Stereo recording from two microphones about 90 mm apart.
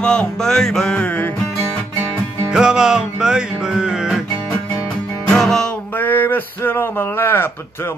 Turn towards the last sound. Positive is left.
turn(degrees=25)  # may be behind; listen again after turning